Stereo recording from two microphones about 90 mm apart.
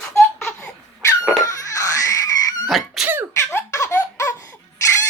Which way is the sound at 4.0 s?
40° left (ahead or behind).